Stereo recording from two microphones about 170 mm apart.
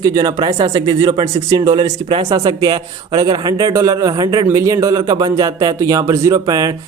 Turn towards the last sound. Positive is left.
turn(degrees=-20)  # may be behind; listen again after turning